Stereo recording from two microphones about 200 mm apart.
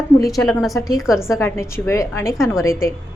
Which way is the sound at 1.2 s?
15° left (ahead or behind).